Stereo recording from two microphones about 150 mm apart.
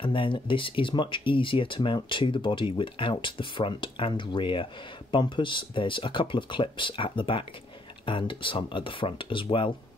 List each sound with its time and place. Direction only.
0.0 s speech: 35° left (ahead or behind)